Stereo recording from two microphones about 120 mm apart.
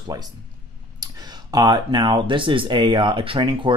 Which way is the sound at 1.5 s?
40° right (ahead or behind).